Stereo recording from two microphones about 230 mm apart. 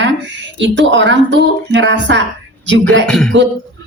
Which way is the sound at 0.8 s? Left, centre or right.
Right.